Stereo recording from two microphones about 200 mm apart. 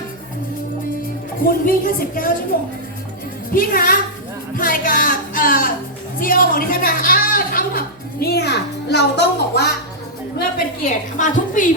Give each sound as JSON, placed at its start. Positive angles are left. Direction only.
{"t": 1.5, "sound": "a woman's voice", "side_deg": 45}
{"t": 4.5, "sound": "music", "side_deg": 45}
{"t": 6.1, "sound": "a woman's voice", "side_deg": 45}
{"t": 10.8, "sound": "a woman's voice", "side_deg": 40}